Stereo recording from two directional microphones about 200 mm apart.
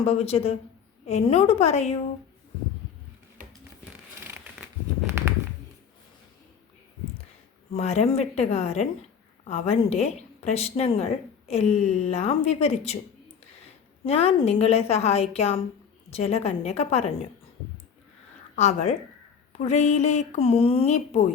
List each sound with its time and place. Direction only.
0.0 s a woman's voice: 30° left (ahead or behind)
7.8 s a woman's voice: 35° left (ahead or behind)
14.0 s a woman's voice: 30° left (ahead or behind)
18.5 s a woman's voice: 35° left (ahead or behind)